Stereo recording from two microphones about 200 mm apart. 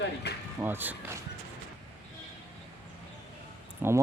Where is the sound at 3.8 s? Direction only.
10° right (ahead or behind).